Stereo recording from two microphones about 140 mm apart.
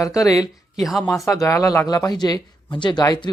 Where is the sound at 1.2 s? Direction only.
20° left (ahead or behind).